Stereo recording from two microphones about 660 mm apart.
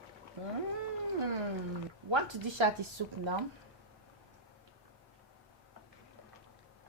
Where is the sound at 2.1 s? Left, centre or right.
Right.